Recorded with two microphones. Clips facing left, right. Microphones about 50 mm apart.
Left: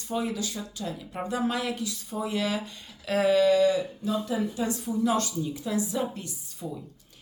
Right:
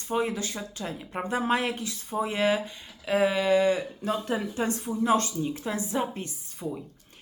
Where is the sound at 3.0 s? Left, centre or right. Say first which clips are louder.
Left 2 dB; centre; by 3.8 s right.